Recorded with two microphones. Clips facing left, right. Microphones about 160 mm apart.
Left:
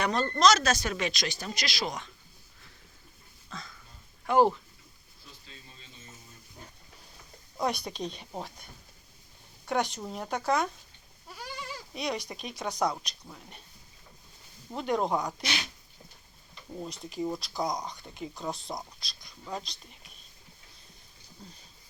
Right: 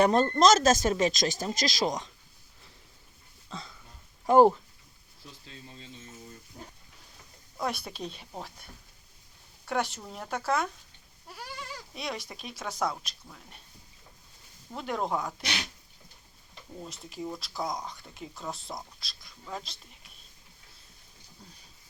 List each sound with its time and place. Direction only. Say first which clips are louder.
0.0 s speech: right 3 dB; 45° right (ahead or behind)
4.3 s speech: right 4 dB; 40° right (ahead or behind)
7.6 s speech: left 2 dB; 5° right (ahead or behind)
9.6 s speech: left 1 dB; 5° right (ahead or behind)
11.3 s goat: left 1 dB; 5° right (ahead or behind)
11.9 s speech: left 4 dB; centre (ahead or behind)
14.8 s speech: left 3 dB; centre (ahead or behind)
16.8 s speech: left 5 dB; centre (ahead or behind)